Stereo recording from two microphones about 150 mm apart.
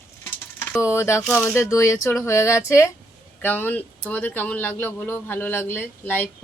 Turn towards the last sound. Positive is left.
turn(degrees=10)  # may be behind; listen again after turning